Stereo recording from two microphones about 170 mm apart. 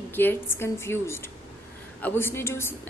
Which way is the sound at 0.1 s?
15° left (ahead or behind).